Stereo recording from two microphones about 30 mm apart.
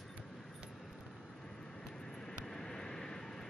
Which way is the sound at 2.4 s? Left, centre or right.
Centre.